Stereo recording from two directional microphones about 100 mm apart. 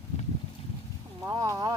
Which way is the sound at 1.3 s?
30° right (ahead or behind).